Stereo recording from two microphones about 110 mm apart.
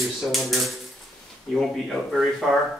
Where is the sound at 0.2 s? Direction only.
Centre (ahead or behind).